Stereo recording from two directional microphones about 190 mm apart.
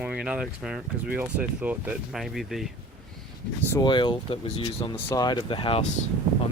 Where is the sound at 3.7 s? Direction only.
25° left (ahead or behind).